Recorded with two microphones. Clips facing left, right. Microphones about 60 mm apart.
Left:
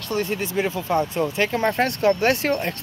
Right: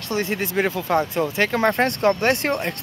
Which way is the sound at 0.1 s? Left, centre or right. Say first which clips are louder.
Right 1 dB; right.